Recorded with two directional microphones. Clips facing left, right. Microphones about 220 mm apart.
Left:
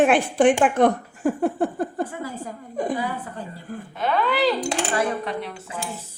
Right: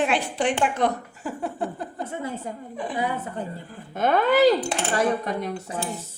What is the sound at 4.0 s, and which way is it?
Speech, 45° right (ahead or behind).